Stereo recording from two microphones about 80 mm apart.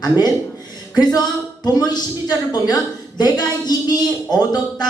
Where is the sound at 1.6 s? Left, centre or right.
Left.